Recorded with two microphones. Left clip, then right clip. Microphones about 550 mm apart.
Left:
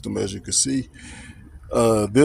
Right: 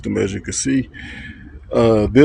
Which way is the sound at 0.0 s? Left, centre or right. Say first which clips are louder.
Right 6 dB; left.